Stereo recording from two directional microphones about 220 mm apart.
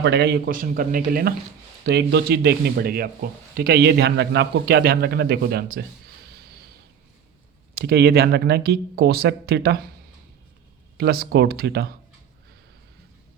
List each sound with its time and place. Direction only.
0.0 s a man's voice: 50° right (ahead or behind)
7.8 s a man's voice: 45° right (ahead or behind)
10.9 s a man's voice: 45° right (ahead or behind)